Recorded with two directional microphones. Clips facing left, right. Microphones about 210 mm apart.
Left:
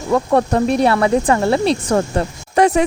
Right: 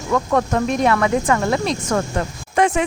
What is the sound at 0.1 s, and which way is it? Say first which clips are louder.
Speech: left 3 dB; 30° left (ahead or behind).